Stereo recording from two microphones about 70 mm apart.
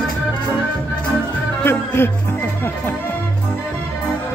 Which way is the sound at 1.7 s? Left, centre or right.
Left.